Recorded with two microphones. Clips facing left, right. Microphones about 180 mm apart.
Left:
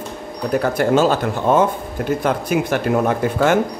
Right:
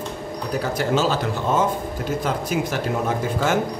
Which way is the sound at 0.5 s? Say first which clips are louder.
Left 6 dB; 55° left (ahead or behind).